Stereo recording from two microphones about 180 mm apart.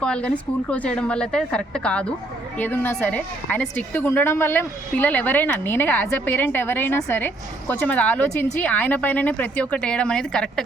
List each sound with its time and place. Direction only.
0.0 s a woman's voice: 5° left (ahead or behind)